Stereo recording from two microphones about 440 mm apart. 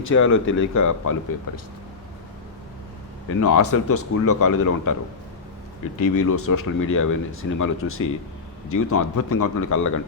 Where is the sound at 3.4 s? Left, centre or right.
Left.